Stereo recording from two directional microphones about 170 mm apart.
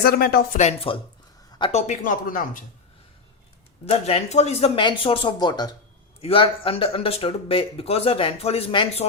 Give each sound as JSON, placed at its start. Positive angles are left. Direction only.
{"t": 0.0, "sound": "speech", "side_deg": 60}
{"t": 0.6, "sound": "speech", "side_deg": 35}
{"t": 1.7, "sound": "speech", "side_deg": 45}
{"t": 3.8, "sound": "speech", "side_deg": 35}